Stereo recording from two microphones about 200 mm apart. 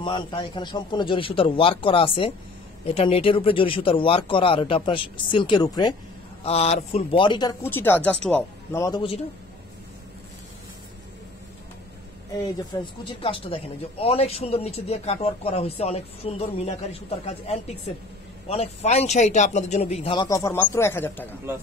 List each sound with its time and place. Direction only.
0.0 s speech: 25° left (ahead or behind)
7.6 s speech: 10° left (ahead or behind)
12.7 s a man's voice: 20° left (ahead or behind)